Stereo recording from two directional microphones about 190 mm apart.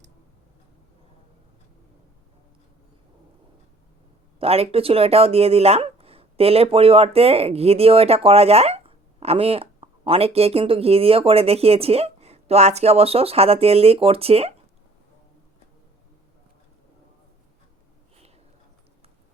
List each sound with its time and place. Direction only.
4.4 s speech: 30° right (ahead or behind)